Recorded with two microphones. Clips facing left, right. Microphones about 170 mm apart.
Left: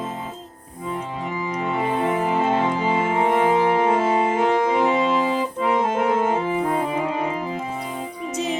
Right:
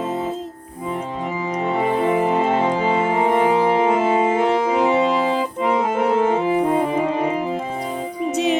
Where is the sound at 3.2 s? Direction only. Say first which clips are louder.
Right 1 dB; 15° right (ahead or behind).